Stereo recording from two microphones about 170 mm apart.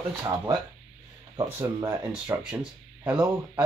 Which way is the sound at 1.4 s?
20° right (ahead or behind).